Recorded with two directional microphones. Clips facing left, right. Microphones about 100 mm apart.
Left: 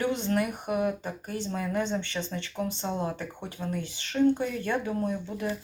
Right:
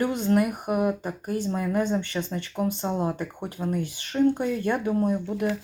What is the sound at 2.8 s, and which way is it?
Speech, 15° right (ahead or behind).